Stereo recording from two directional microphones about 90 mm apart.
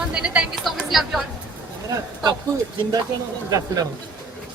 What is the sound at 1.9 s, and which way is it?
Speech, 45° right (ahead or behind).